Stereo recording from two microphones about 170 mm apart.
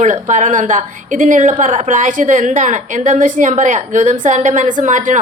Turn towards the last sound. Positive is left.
turn(degrees=-50)  # may be behind; listen again after turning